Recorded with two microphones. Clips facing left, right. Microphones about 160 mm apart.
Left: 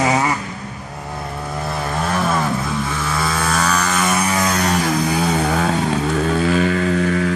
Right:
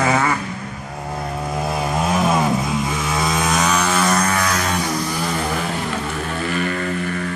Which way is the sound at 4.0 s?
10° left (ahead or behind).